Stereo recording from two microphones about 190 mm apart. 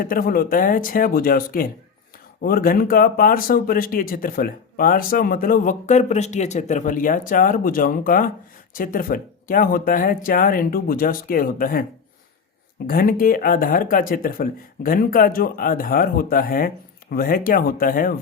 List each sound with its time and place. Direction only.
0.0 s speech: 50° left (ahead or behind)
12.9 s speech: 50° left (ahead or behind)